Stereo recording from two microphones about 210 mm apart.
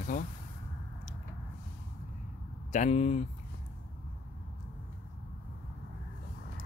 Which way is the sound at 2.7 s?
35° left (ahead or behind).